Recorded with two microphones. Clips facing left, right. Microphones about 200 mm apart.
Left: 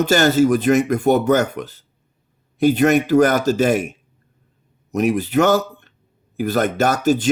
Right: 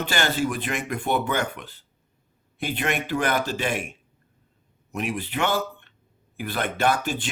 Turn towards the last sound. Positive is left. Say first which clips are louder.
# left 7 dB
turn(degrees=40)  # may be behind; listen again after turning